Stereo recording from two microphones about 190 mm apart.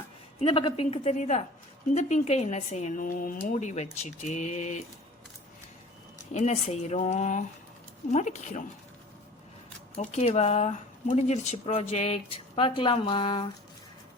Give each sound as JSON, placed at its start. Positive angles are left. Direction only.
{"t": 0.3, "sound": "speech", "side_deg": 30}
{"t": 6.3, "sound": "speech", "side_deg": 35}
{"t": 9.9, "sound": "speech", "side_deg": 35}